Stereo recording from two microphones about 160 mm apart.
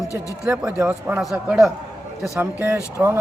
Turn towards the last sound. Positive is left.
turn(degrees=-15)  # may be behind; listen again after turning